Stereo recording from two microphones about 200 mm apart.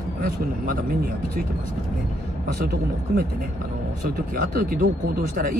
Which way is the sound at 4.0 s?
50° right (ahead or behind).